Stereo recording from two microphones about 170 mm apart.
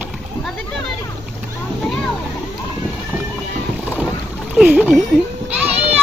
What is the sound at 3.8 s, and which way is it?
Boat, 10° right (ahead or behind).